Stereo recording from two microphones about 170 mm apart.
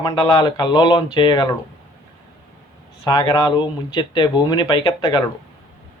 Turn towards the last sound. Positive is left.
turn(degrees=30)  # may be behind; listen again after turning